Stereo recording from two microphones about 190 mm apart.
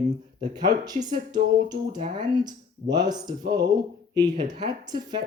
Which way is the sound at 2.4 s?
20° right (ahead or behind).